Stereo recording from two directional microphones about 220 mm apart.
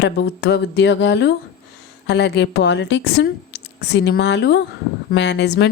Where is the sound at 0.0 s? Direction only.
50° left (ahead or behind).